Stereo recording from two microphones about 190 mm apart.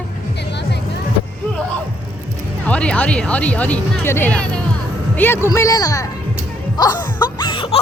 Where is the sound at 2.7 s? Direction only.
5° left (ahead or behind).